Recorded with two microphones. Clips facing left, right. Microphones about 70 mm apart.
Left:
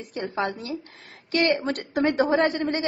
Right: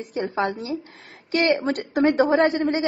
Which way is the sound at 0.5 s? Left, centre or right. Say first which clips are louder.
Right 3 dB; centre.